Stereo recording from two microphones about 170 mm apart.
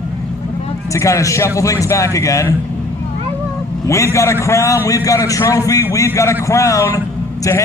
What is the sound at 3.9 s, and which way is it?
A man's voice, 15° left (ahead or behind).